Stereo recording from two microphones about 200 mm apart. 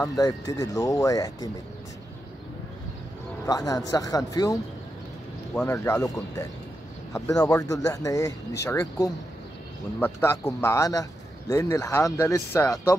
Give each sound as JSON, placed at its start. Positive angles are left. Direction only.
{"t": 0.0, "sound": "a man's voice", "side_deg": 15}
{"t": 3.4, "sound": "a man's voice", "side_deg": 15}
{"t": 5.7, "sound": "a man's voice", "side_deg": 15}